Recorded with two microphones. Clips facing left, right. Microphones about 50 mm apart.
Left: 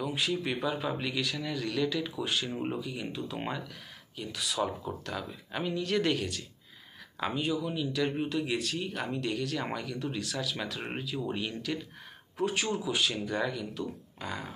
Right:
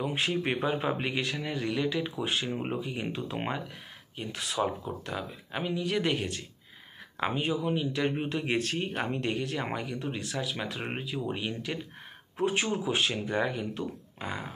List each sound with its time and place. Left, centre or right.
0.0 s speech: right
5.0 s speech: centre
6.1 s speech: right